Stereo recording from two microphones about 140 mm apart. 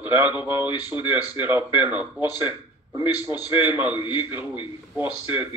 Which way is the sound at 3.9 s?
35° left (ahead or behind).